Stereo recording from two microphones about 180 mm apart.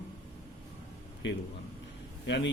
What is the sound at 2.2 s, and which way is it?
Speech, 80° left.